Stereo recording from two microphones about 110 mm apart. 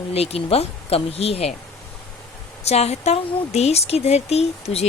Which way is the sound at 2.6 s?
75° left (ahead or behind).